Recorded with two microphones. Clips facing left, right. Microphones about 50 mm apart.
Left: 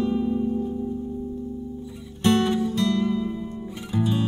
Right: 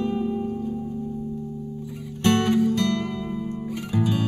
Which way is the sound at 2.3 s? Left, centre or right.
Right.